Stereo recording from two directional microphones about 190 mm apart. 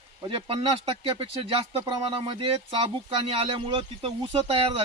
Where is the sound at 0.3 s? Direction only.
30° right (ahead or behind).